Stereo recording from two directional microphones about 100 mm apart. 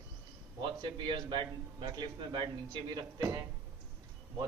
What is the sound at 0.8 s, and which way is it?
A man's voice, 55° right (ahead or behind).